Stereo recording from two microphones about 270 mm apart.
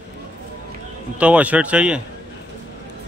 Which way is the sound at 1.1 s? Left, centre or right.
Centre.